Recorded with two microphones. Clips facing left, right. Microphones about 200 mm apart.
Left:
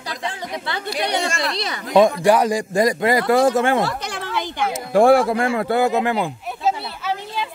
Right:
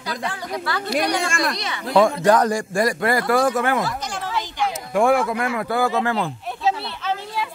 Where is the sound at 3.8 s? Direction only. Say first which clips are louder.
Left 2 dB; 65° left (ahead or behind).